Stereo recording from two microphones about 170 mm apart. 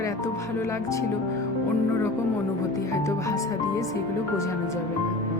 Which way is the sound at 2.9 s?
20° left (ahead or behind).